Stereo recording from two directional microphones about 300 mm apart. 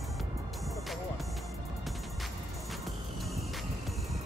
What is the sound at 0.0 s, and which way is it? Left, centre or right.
Music, centre.